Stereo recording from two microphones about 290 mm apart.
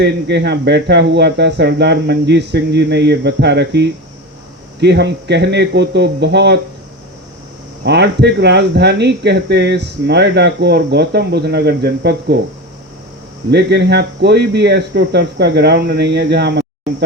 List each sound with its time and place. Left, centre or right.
0.0 s speech: right
7.9 s speech: right
13.5 s speech: right